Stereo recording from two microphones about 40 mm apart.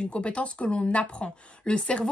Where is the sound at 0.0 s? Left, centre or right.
Left.